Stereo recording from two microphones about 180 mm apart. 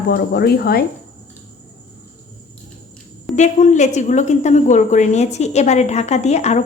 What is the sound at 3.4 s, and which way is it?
A woman's voice, 40° left (ahead or behind).